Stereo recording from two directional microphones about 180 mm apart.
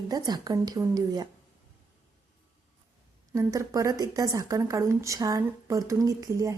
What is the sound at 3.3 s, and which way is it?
Speech, 15° right (ahead or behind).